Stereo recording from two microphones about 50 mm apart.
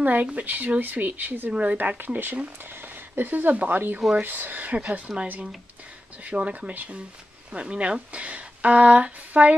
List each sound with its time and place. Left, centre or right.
0.0 s speech: right
1.5 s speech: right
2.0 s speech: right
6.7 s speech: right
7.5 s speech: right